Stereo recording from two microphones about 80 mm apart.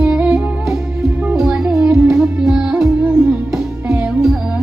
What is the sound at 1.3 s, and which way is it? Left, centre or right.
Music, centre.